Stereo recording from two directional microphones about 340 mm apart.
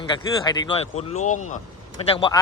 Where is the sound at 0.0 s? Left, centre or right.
Centre.